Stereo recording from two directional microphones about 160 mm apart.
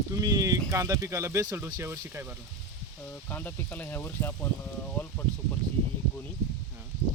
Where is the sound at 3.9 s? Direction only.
15° left (ahead or behind).